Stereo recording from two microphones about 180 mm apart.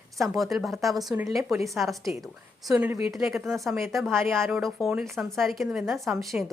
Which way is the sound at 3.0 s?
Centre (ahead or behind).